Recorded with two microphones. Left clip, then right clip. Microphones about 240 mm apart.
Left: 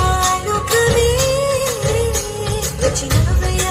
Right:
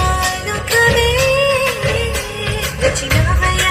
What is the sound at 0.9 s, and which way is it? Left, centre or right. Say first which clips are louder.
Music: right 2 dB; left.